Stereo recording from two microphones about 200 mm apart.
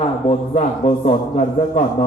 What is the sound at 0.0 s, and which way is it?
A man's voice, 35° left (ahead or behind).